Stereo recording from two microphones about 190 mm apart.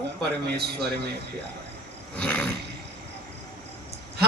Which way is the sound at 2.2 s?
10° left (ahead or behind).